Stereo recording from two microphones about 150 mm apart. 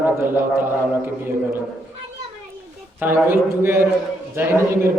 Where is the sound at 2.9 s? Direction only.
15° right (ahead or behind).